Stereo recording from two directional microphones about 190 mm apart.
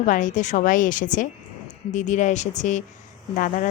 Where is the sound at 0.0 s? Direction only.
40° left (ahead or behind).